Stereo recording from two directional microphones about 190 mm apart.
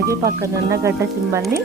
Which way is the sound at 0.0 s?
15° right (ahead or behind).